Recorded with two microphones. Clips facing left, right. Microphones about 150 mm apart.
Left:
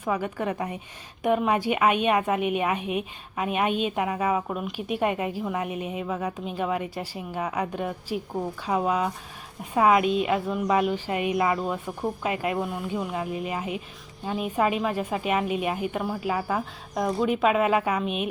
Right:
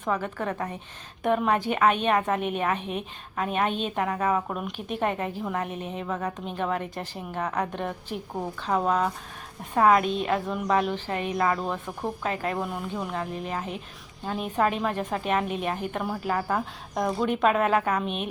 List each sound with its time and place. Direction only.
0.0 s a woman's voice: 10° left (ahead or behind)